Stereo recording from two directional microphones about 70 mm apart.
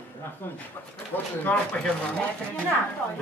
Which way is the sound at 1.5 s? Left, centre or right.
Left.